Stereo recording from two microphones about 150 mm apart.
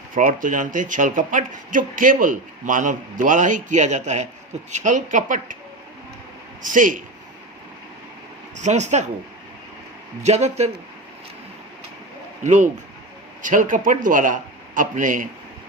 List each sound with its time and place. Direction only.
0.1 s speech: 65° right (ahead or behind)
6.6 s speech: 60° right (ahead or behind)
8.5 s speech: 50° right (ahead or behind)
10.2 s speech: 50° right (ahead or behind)
12.4 s speech: 55° right (ahead or behind)